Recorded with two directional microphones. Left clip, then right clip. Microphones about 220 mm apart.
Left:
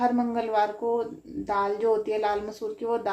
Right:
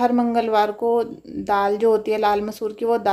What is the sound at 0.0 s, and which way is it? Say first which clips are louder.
Speech: right 6 dB; 45° right (ahead or behind).